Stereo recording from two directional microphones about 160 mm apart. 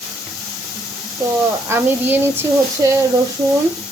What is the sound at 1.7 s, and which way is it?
Speech, 15° right (ahead or behind).